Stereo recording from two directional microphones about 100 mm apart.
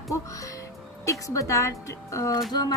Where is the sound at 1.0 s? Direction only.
35° left (ahead or behind).